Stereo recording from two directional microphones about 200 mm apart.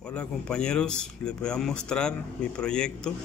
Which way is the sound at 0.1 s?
5° left (ahead or behind).